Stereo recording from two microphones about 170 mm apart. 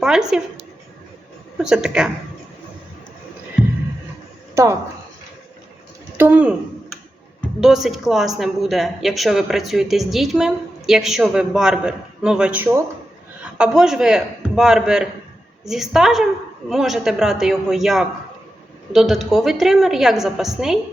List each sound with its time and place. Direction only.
0.0 s speech: 5° right (ahead or behind)
1.5 s speech: 5° right (ahead or behind)
4.5 s a woman's voice: 15° right (ahead or behind)
6.1 s speech: 10° right (ahead or behind)
7.6 s speech: centre (ahead or behind)